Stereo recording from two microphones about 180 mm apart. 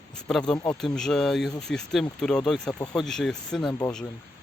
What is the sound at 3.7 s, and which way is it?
Speech, 15° left (ahead or behind).